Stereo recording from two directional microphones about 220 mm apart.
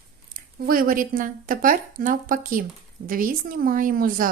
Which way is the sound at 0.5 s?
40° right (ahead or behind).